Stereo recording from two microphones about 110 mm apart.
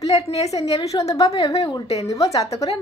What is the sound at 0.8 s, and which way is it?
A woman's voice, 30° left (ahead or behind).